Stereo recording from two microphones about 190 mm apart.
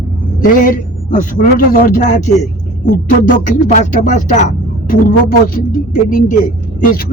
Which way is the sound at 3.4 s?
45° left (ahead or behind).